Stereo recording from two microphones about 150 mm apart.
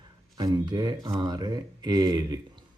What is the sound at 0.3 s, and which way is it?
Speech, 25° right (ahead or behind).